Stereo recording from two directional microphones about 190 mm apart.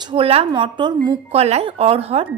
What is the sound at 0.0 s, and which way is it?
A woman's voice, 25° right (ahead or behind).